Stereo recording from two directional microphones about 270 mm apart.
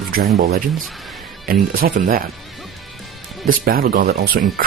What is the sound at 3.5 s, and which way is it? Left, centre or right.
Speech, right.